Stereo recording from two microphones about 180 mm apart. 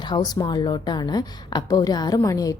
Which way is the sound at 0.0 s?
20° left (ahead or behind).